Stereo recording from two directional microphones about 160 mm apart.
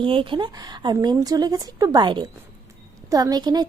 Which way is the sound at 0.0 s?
30° right (ahead or behind).